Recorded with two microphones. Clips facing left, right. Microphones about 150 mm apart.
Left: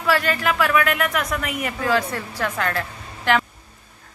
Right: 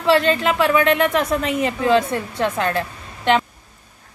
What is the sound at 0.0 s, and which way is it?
A woman's voice, 25° right (ahead or behind).